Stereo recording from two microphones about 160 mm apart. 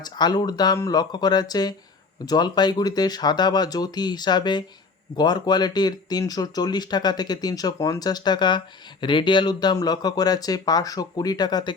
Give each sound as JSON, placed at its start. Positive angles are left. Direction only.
{"t": 0.0, "sound": "speech", "side_deg": 25}